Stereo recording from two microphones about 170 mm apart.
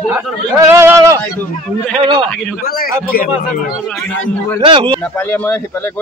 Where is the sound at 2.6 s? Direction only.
60° left (ahead or behind).